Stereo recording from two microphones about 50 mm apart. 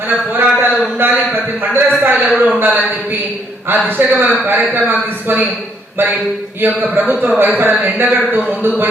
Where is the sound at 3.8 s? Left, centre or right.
Right.